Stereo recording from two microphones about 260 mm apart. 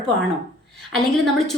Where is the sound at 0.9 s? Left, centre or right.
Centre.